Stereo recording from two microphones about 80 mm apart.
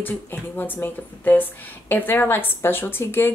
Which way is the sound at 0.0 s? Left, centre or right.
Left.